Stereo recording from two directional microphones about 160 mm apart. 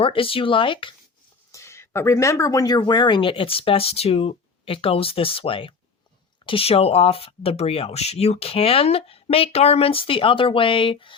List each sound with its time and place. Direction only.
0.0 s speech: 35° left (ahead or behind)
1.5 s speech: 15° left (ahead or behind); by 11.1 s 30° left (ahead or behind)